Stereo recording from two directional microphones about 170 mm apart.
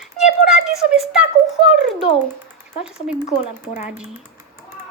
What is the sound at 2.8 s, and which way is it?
Speech, 5° right (ahead or behind).